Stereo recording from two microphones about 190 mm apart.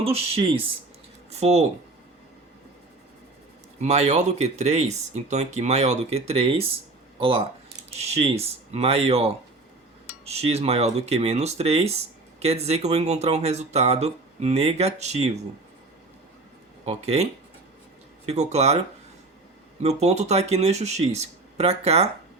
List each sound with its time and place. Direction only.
0.0 s speech: 30° right (ahead or behind)
3.8 s speech: 35° right (ahead or behind)
16.8 s speech: 35° right (ahead or behind)
18.3 s speech: 35° right (ahead or behind)
19.8 s speech: 35° right (ahead or behind)